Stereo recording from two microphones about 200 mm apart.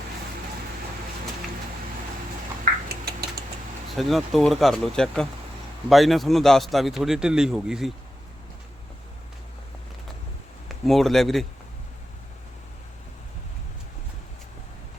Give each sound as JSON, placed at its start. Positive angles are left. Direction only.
{"t": 2.9, "sound": "a sound", "side_deg": -50}
{"t": 3.9, "sound": "a man's voice", "side_deg": 0}
{"t": 10.7, "sound": "speech", "side_deg": 0}